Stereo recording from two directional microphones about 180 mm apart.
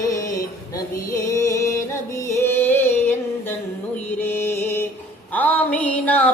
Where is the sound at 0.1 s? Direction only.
20° left (ahead or behind).